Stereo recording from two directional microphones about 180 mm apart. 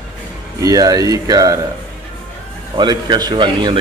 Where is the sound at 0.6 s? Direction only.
20° right (ahead or behind).